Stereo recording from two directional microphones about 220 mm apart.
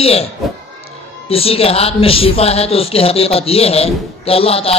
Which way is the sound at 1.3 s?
25° left (ahead or behind).